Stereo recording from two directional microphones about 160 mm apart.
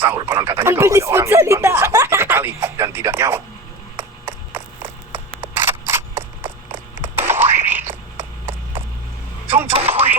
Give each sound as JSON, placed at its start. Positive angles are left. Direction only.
{"t": 0.0, "sound": "speech", "side_deg": -15}
{"t": 4.5, "sound": "camera", "side_deg": -15}
{"t": 7.7, "sound": "frog", "side_deg": -15}
{"t": 9.5, "sound": "music", "side_deg": -15}